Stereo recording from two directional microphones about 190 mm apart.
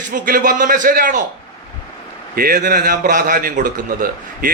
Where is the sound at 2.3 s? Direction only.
50° right (ahead or behind).